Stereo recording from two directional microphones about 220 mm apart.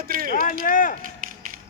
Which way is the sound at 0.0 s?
40° right (ahead or behind).